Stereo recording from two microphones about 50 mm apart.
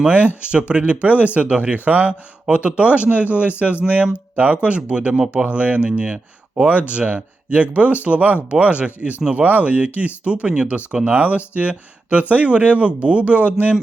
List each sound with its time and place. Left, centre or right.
0.7 s speech: right
5.5 s speech: right